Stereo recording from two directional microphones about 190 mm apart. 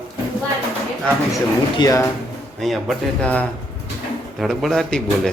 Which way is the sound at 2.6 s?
Centre (ahead or behind).